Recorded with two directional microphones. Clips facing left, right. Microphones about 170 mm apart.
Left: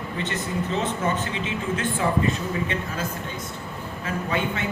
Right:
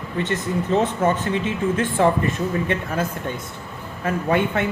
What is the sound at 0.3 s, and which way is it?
Speech, 55° right (ahead or behind).